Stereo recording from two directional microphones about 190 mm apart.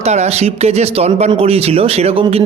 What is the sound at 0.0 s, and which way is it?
Speech, 35° right (ahead or behind).